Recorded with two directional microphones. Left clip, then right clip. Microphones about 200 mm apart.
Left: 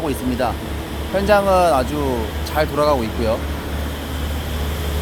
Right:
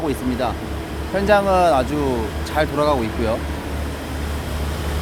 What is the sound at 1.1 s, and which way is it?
Speech, centre (ahead or behind).